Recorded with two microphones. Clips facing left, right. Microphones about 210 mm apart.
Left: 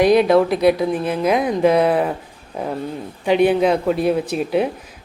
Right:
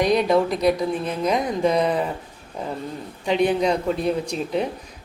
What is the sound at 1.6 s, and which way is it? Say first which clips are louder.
Speech: left 6 dB; 60° left (ahead or behind).